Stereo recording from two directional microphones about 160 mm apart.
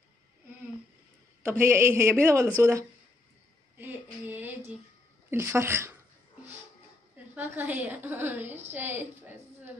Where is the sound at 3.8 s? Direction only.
10° right (ahead or behind).